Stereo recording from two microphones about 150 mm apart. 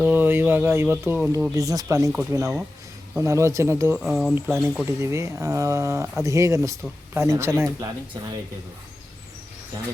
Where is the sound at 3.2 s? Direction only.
20° right (ahead or behind).